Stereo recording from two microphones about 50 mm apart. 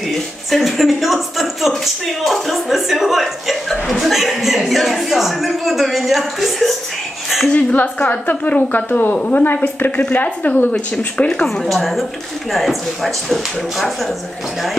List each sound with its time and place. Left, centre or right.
0.1 s a woman's voice: centre
7.7 s a woman's voice: left
11.6 s speech: centre